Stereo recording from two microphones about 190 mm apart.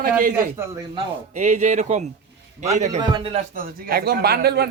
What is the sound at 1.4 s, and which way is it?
Speech, 40° right (ahead or behind).